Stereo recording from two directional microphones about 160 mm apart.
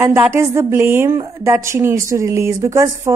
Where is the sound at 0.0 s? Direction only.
15° right (ahead or behind).